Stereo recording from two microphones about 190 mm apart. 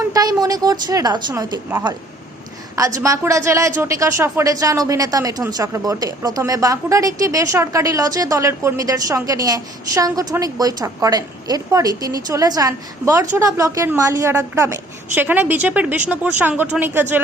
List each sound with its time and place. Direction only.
0.1 s speech: 20° right (ahead or behind)
3.0 s speech: 15° right (ahead or behind)